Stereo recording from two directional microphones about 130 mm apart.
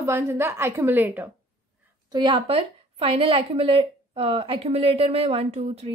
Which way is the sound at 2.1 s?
40° right (ahead or behind).